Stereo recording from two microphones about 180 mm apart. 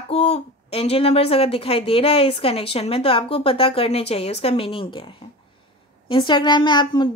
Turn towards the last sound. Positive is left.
turn(degrees=25)  # may be behind; listen again after turning